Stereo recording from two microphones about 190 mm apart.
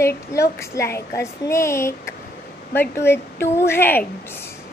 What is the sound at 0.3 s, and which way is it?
Speech, 15° left (ahead or behind).